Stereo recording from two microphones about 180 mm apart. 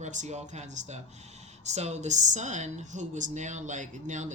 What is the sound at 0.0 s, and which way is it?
Speech, 40° right (ahead or behind).